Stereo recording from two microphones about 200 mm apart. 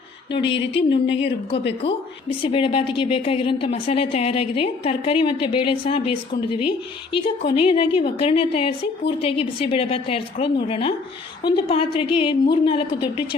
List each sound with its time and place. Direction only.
0.4 s speech: 60° left (ahead or behind)
2.4 s speech: 25° left (ahead or behind)